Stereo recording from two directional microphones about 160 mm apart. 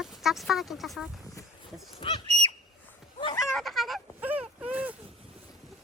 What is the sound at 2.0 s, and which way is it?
Goose, 35° left (ahead or behind).